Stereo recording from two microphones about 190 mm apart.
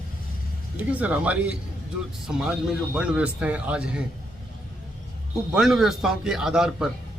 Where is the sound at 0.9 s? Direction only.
5° right (ahead or behind).